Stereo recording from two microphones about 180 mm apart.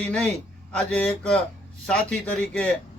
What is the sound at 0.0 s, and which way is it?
Speech, 10° left (ahead or behind).